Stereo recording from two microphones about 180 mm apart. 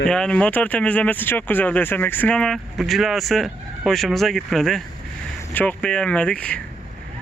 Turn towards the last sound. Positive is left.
turn(degrees=5)  # may be behind; listen again after turning